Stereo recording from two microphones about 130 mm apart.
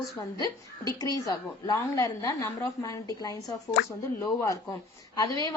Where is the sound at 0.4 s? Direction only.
30° left (ahead or behind).